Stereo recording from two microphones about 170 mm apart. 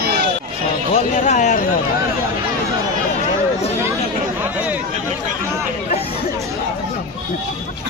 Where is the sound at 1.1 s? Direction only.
45° left (ahead or behind).